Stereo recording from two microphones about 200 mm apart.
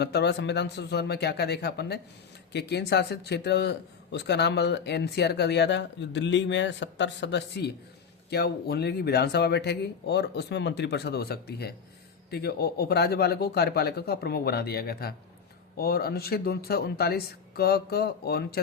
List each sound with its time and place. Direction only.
0.0 s a man's voice: 55° left (ahead or behind)